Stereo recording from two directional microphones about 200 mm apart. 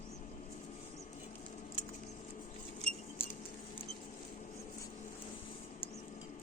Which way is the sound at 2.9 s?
35° right (ahead or behind).